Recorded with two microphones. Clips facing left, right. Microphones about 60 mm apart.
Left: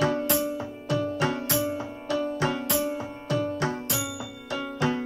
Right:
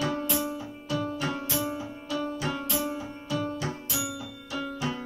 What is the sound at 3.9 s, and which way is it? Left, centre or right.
Music, left.